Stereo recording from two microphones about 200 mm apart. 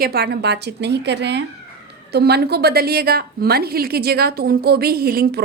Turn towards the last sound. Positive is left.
turn(degrees=-50)  # may be behind; listen again after turning